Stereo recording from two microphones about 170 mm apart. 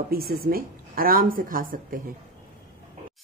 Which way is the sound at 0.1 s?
60° right (ahead or behind).